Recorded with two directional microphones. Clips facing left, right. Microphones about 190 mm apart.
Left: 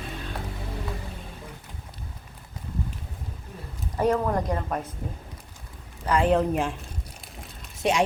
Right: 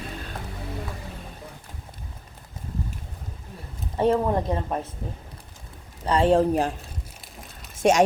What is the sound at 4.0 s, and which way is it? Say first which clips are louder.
Speech: right 2 dB; 25° right (ahead or behind).